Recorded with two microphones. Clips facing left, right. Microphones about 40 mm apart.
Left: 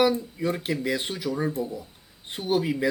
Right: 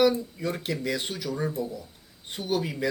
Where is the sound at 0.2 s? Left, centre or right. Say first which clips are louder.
Left 3 dB; centre.